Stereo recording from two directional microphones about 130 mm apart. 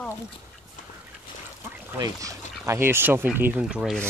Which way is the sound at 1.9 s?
25° right (ahead or behind).